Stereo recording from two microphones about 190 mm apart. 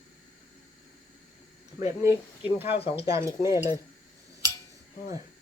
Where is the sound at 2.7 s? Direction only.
30° left (ahead or behind).